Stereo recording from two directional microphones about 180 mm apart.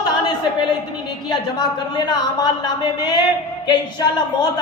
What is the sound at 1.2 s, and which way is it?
A woman's voice, 25° left (ahead or behind).